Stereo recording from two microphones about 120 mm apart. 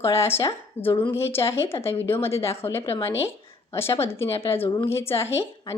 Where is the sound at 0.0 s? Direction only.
20° left (ahead or behind).